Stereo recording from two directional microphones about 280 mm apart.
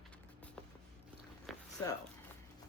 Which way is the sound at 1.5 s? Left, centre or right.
Centre.